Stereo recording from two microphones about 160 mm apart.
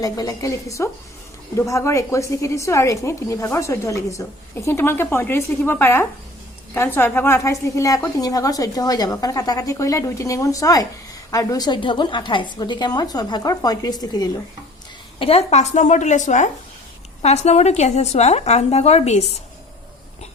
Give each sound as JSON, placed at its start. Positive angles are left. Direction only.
{"t": 0.0, "sound": "a woman's voice", "side_deg": 20}
{"t": 15.2, "sound": "a woman's voice", "side_deg": 40}